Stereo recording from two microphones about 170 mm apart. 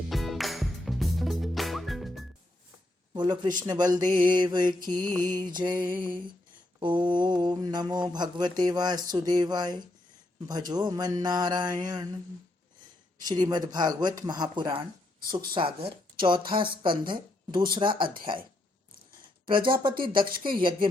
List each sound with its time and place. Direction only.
0.1 s music: centre (ahead or behind)
3.1 s speech: 25° right (ahead or behind)
3.6 s mantra: 25° right (ahead or behind)
13.2 s mantra: 25° right (ahead or behind)
17.1 s a woman's voice: 30° right (ahead or behind)
17.7 s mantra: 30° right (ahead or behind)
19.5 s mantra: 30° right (ahead or behind)